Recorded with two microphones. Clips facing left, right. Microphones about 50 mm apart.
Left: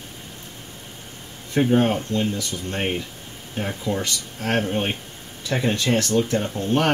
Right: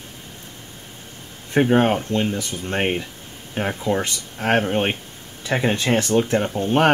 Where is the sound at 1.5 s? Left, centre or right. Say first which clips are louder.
Right 2 dB; right.